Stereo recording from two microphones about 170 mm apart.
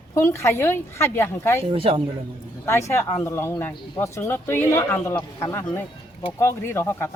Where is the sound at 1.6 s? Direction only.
30° right (ahead or behind).